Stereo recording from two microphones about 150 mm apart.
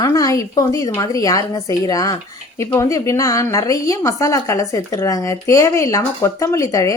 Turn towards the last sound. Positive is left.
turn(degrees=20)  # may be behind; listen again after turning